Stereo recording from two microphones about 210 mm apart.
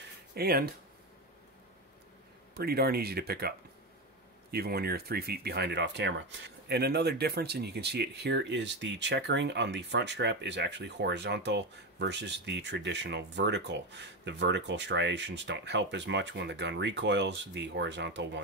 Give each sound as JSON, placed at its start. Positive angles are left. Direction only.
{"t": 0.3, "sound": "speech", "side_deg": -45}
{"t": 2.5, "sound": "speech", "side_deg": -50}